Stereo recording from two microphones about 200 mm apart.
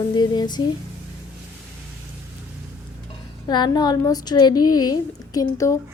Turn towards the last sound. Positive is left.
turn(degrees=15)  # may be behind; listen again after turning